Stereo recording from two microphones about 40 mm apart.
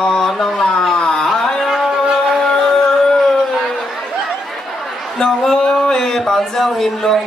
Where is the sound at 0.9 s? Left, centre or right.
Centre.